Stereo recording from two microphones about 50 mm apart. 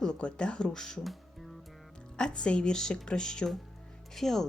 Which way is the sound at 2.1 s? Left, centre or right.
Centre.